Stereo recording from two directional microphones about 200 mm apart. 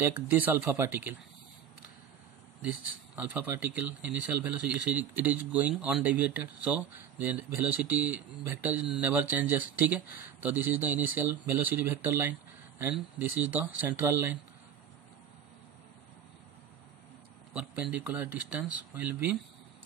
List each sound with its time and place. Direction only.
0.0 s speech: 10° right (ahead or behind)
3.2 s speech: 10° right (ahead or behind)
18.0 s speech: 10° right (ahead or behind)